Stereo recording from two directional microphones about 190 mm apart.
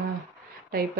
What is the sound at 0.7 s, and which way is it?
Speech, 50° right (ahead or behind).